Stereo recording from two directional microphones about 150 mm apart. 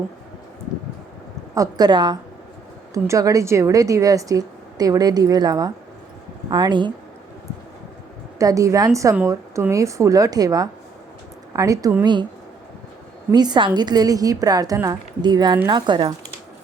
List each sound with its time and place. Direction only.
1.5 s a woman's voice: 25° right (ahead or behind)
8.4 s a woman's voice: 20° right (ahead or behind)
13.3 s a woman's voice: 30° right (ahead or behind)